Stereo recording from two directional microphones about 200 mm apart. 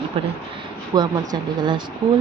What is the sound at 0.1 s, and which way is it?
A woman's voice, 25° right (ahead or behind).